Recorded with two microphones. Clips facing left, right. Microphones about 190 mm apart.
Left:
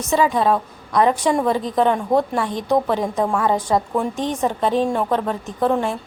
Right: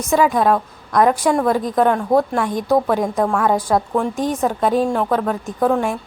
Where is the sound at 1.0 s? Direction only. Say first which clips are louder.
Right 2 dB; 10° right (ahead or behind).